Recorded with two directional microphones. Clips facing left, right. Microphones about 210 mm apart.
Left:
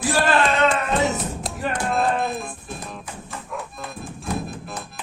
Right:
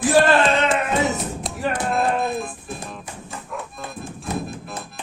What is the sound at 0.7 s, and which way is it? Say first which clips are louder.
Music: right 1 dB; centre (ahead or behind).